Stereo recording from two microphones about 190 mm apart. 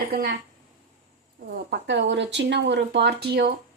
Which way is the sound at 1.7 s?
70° right (ahead or behind).